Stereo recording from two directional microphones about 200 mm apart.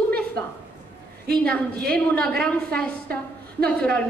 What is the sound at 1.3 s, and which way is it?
A woman's voice, 5° left (ahead or behind).